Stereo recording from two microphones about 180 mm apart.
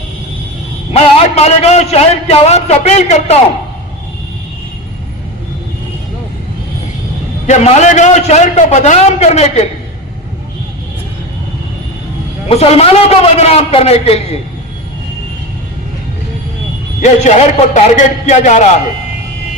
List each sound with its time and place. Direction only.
0.9 s a man's voice: 35° left (ahead or behind)
7.4 s a man's voice: 40° left (ahead or behind)
12.5 s a man's voice: 35° left (ahead or behind)
17.0 s a man's voice: 40° left (ahead or behind)